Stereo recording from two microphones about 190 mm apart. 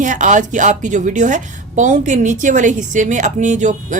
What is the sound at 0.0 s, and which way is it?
A woman's voice, 40° right (ahead or behind).